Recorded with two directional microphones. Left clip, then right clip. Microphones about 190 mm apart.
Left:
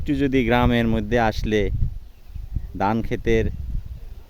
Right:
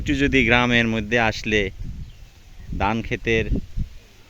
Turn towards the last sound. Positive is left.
turn(degrees=25)  # may be behind; listen again after turning